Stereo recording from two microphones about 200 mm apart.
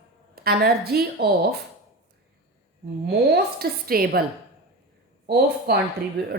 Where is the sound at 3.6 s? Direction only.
50° right (ahead or behind).